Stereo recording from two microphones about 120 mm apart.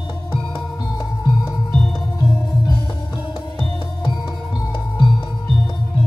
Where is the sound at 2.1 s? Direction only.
40° left (ahead or behind).